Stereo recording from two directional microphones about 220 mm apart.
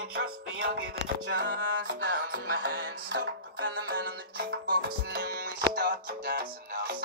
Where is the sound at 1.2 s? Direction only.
50° right (ahead or behind).